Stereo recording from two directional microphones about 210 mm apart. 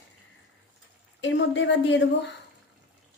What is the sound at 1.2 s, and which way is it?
A woman's voice, 60° left (ahead or behind).